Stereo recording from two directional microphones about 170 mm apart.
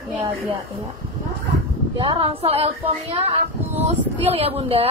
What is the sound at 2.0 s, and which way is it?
A woman's voice, 30° right (ahead or behind).